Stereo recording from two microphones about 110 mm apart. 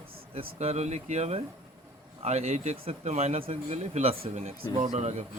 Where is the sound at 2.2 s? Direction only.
80° right.